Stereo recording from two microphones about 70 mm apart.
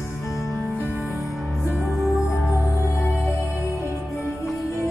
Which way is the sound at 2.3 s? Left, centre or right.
Left.